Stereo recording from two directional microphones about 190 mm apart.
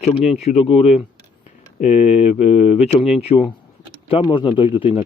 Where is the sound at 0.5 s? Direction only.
40° left (ahead or behind).